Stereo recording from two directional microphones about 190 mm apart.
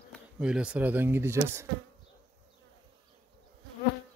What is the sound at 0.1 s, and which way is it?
Speech, 5° right (ahead or behind).